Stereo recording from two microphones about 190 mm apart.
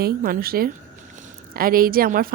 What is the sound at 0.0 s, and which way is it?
A woman's voice, 50° right (ahead or behind).